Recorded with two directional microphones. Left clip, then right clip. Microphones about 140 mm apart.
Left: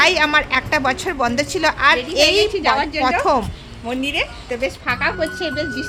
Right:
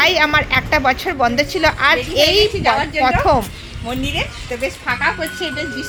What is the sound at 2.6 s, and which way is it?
Speech, 40° left (ahead or behind).